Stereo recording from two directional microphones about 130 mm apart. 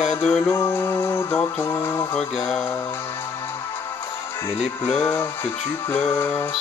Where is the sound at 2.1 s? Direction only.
5° left (ahead or behind).